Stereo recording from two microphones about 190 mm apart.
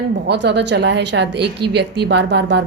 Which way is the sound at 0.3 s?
65° right (ahead or behind).